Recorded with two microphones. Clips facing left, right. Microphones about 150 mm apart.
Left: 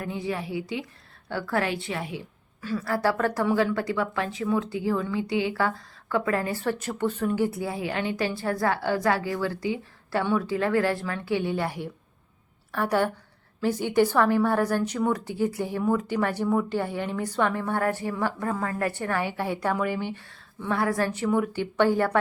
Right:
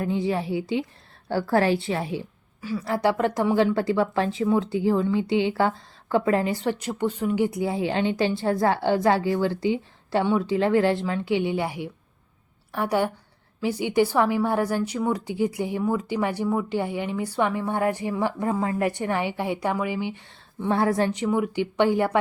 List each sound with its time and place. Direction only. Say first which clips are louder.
0.0 s a woman's voice: right 6 dB; 30° right (ahead or behind)
2.6 s a woman's voice: right 1 dB; 15° right (ahead or behind)
20.7 s a woman's voice: right 3 dB; 25° right (ahead or behind)